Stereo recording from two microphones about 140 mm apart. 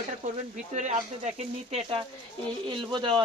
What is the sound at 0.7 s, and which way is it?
Speech, 60° right (ahead or behind).